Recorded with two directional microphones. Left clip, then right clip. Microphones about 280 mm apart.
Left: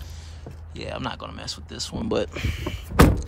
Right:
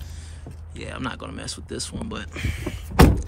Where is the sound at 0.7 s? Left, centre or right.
Centre.